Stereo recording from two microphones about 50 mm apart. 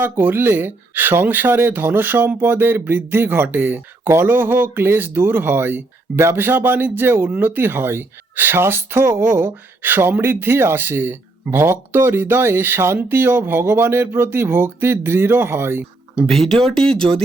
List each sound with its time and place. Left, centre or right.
0.0 s speech: right
16.2 s speech: centre